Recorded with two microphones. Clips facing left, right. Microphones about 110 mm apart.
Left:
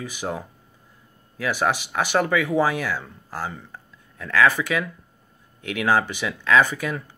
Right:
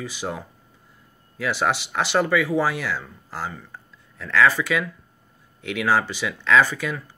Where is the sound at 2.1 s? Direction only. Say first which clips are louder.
Right 1 dB; 15° left (ahead or behind).